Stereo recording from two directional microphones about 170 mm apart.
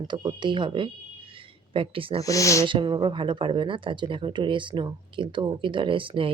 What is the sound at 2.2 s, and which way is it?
Speech, 20° left (ahead or behind).